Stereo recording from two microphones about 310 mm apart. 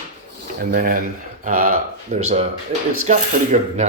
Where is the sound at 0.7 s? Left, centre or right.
Right.